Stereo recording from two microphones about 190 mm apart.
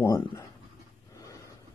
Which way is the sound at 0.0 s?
15° left (ahead or behind).